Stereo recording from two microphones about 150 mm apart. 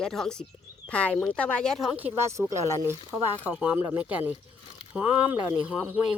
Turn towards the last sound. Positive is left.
turn(degrees=-10)  # may be behind; listen again after turning